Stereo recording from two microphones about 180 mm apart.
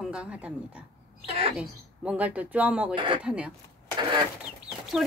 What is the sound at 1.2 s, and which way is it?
Speech, 35° right (ahead or behind).